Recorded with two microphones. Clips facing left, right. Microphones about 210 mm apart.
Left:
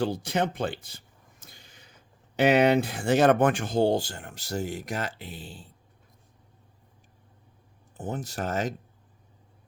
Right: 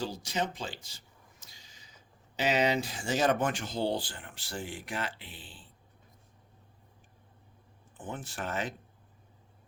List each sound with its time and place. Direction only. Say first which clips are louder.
0.0 s speech: left 7 dB; 60° left (ahead or behind); by 5.6 s 40° left (ahead or behind)
7.9 s speech: left 7 dB; 40° left (ahead or behind)